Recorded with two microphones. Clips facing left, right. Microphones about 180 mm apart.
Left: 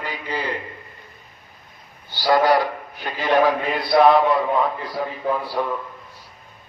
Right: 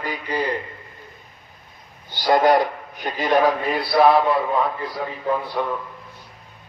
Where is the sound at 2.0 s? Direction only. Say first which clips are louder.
Right 1 dB; 20° right (ahead or behind).